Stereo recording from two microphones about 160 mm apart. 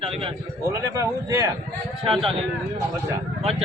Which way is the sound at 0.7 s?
20° right (ahead or behind).